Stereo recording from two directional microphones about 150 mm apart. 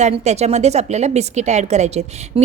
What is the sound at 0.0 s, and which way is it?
A woman's voice, 45° right (ahead or behind).